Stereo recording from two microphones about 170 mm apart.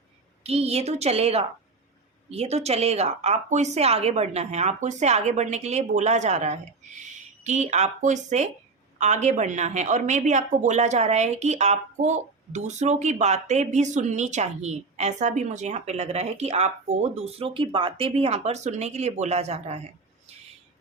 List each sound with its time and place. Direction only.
0.4 s a woman's voice: 35° right (ahead or behind)